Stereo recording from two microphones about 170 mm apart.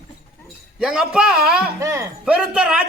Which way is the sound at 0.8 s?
5° right (ahead or behind).